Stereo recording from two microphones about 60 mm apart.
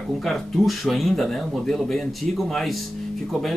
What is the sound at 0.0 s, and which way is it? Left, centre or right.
Speech, centre.